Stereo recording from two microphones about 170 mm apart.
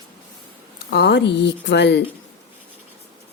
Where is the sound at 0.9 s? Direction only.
80° left.